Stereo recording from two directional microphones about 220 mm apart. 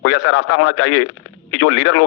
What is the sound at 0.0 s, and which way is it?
A man's voice, 80° left.